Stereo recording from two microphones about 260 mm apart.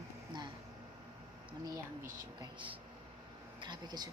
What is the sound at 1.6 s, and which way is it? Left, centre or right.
Speech, centre.